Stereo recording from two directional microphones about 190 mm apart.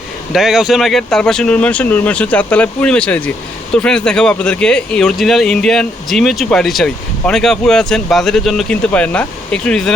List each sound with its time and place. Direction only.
0.3 s speech: centre (ahead or behind)